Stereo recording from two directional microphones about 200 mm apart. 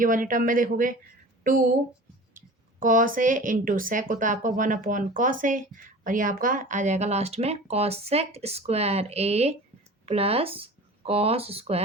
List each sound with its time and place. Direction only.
0.0 s speech: 40° right (ahead or behind)
2.8 s speech: 40° right (ahead or behind)